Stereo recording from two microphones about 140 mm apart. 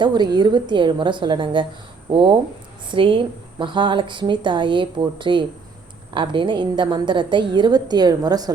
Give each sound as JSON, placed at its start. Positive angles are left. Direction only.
{"t": 0.0, "sound": "a woman's voice", "side_deg": -30}